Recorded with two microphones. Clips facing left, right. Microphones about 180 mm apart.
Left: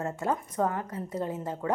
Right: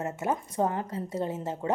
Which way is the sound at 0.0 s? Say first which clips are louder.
Even; 20° right (ahead or behind).